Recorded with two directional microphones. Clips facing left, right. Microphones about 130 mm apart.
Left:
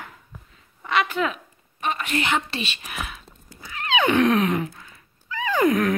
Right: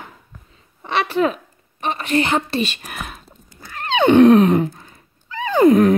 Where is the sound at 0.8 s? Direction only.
35° right (ahead or behind).